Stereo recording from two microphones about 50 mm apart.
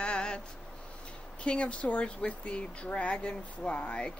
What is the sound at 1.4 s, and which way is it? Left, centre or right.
Speech, left.